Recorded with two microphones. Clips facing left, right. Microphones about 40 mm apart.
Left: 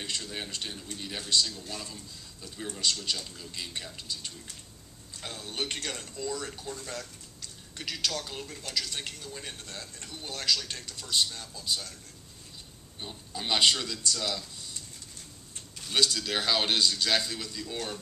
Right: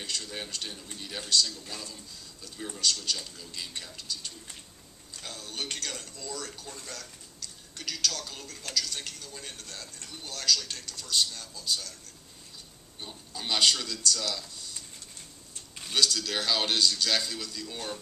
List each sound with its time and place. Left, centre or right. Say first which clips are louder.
0.0 s a man's voice: left 1 dB; left
1.3 s speech: right 1 dB; left
2.5 s a man's voice: left 1 dB; centre
2.8 s a man's voice: right 1 dB; left
13.0 s speech: left 2 dB; centre
15.9 s a man's voice: even; centre